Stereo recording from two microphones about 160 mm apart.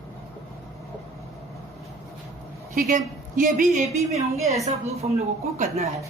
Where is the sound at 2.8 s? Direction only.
60° right (ahead or behind); by 5.8 s 40° right (ahead or behind).